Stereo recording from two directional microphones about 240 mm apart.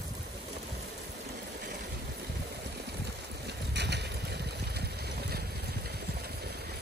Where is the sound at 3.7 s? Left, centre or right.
Right.